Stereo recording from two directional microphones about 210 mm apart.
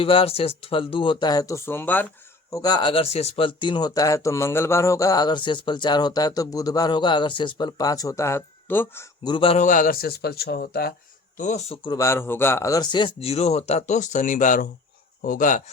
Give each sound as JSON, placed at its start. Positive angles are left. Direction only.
{"t": 0.0, "sound": "speech", "side_deg": 25}
{"t": 9.2, "sound": "a man's voice", "side_deg": 25}
{"t": 11.3, "sound": "speech", "side_deg": 35}